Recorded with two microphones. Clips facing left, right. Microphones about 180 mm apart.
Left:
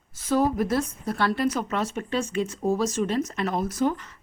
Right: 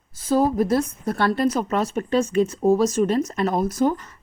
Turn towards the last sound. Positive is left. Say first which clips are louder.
# right 4 dB
turn(degrees=-40)  # may be behind; listen again after turning